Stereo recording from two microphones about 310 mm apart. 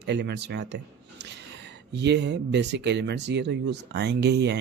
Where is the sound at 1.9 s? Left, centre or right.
Right.